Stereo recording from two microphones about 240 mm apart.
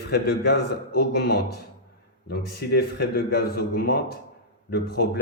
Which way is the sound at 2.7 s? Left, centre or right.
Left.